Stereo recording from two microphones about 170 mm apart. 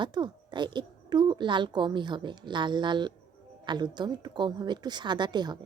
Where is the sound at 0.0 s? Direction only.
25° right (ahead or behind).